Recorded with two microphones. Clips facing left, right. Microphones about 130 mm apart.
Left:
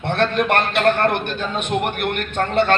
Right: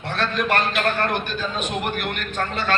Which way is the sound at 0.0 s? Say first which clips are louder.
Left 5 dB; 60° left (ahead or behind).